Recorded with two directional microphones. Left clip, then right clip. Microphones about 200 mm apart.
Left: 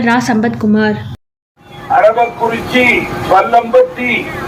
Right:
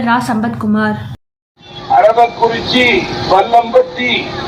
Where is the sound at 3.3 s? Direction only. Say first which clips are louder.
Left 1 dB; 20° left (ahead or behind).